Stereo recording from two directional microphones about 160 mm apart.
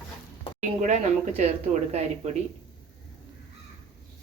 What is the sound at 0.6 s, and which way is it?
Speech, 50° right (ahead or behind).